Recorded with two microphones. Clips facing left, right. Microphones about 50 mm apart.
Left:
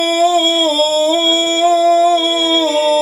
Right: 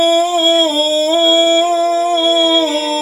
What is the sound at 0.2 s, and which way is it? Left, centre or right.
Humming, right.